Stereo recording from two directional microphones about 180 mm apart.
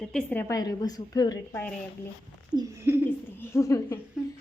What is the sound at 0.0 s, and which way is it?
A woman's voice, 5° left (ahead or behind).